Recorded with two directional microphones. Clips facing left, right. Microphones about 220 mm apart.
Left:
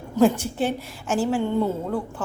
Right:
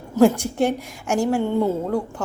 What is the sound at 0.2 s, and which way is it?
A woman's voice, 10° right (ahead or behind).